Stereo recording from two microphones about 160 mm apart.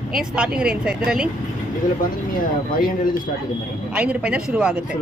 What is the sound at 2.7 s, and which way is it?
Speech, 60° left (ahead or behind).